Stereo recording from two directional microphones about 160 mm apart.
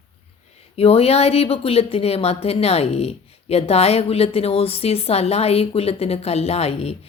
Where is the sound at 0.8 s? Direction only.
40° left (ahead or behind).